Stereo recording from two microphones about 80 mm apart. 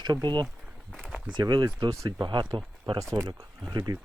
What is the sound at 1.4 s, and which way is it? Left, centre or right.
Speech, right.